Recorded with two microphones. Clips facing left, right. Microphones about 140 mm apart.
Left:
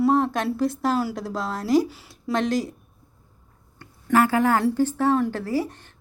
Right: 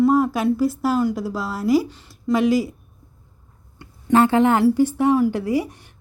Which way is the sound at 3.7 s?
25° right (ahead or behind).